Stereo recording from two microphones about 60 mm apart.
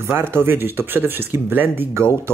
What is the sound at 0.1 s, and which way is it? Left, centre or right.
Speech, right.